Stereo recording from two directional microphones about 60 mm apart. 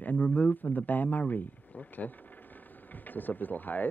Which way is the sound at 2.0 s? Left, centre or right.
Centre.